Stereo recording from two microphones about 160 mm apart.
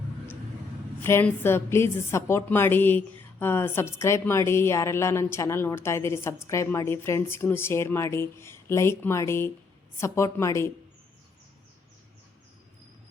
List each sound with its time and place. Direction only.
1.0 s a woman's voice: 15° left (ahead or behind)